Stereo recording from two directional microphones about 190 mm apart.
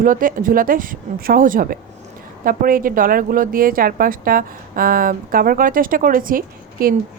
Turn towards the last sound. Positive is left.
turn(degrees=-50)  # may be behind; listen again after turning